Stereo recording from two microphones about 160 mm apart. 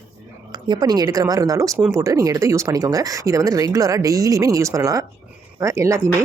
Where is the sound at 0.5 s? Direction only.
25° right (ahead or behind).